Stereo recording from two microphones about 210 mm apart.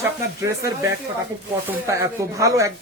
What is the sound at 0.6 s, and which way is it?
Speech, 15° right (ahead or behind).